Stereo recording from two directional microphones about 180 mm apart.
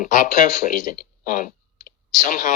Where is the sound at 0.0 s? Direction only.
45° left (ahead or behind).